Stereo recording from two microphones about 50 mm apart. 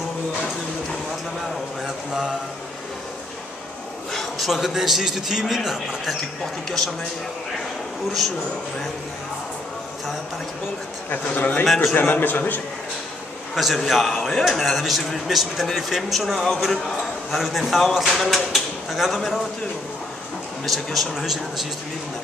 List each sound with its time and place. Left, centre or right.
4.1 s a sound: centre
4.5 s a man's voice: centre
11.1 s a man's voice: left
11.6 s a man's voice: centre
11.9 s a man's voice: left
13.7 s a man's voice: centre
20.6 s a man's voice: centre